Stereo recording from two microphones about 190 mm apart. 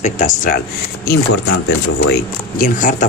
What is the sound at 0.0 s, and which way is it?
Speech, 40° left (ahead or behind).